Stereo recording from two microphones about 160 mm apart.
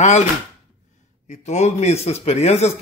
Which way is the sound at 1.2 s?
45° left (ahead or behind).